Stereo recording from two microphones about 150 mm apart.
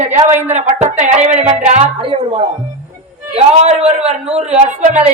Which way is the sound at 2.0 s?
35° right (ahead or behind).